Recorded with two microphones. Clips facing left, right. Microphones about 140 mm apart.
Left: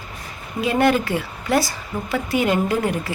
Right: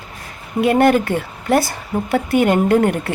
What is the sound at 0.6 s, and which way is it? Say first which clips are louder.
A woman's voice: right 5 dB; 55° right (ahead or behind).